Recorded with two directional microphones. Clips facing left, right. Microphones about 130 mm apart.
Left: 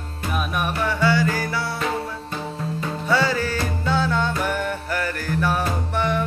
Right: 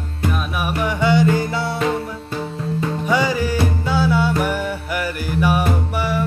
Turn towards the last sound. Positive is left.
turn(degrees=-5)  # may be behind; listen again after turning